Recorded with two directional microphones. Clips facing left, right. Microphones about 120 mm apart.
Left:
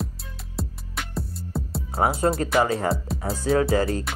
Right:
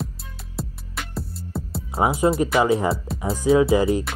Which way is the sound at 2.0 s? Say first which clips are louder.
Right 3 dB; 10° right (ahead or behind).